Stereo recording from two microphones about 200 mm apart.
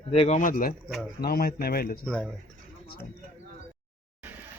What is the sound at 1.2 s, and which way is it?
Speech, 50° left (ahead or behind).